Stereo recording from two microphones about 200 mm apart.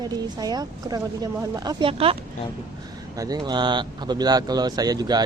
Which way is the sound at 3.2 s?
20° right (ahead or behind).